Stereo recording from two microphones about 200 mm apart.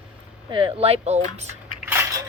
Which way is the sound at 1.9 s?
10° right (ahead or behind).